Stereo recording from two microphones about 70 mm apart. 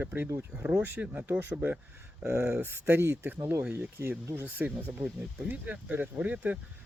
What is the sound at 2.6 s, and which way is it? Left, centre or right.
Speech, right.